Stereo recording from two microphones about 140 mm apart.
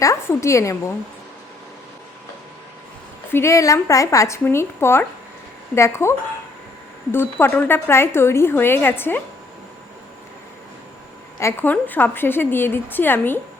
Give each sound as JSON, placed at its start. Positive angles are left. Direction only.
{"t": 0.0, "sound": "speech", "side_deg": 20}
{"t": 3.3, "sound": "speech", "side_deg": 20}
{"t": 11.3, "sound": "speech", "side_deg": 15}